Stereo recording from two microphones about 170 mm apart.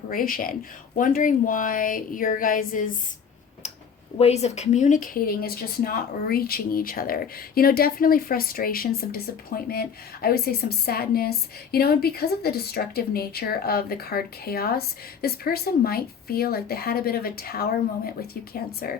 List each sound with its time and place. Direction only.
0.1 s speech: 55° left (ahead or behind)
4.2 s speech: 40° left (ahead or behind); by 18.9 s 65° left (ahead or behind)